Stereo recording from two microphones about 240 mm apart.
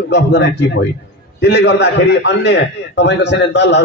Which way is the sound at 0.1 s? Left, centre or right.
Left.